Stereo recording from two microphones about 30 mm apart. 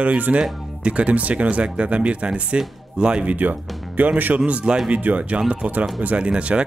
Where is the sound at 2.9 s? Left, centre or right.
Right.